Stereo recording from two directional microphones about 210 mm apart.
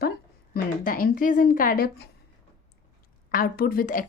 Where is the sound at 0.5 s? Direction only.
45° left (ahead or behind).